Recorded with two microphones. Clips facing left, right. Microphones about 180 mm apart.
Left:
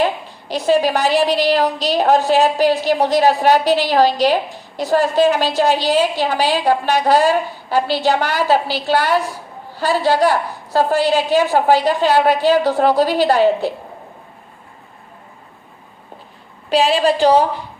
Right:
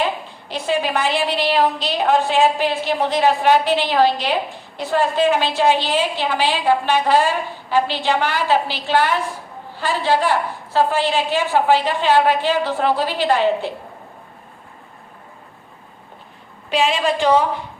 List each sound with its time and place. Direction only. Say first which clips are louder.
0.4 s a woman's voice: left 6 dB; 40° left (ahead or behind)
16.6 s a woman's voice: left 4 dB; 35° left (ahead or behind)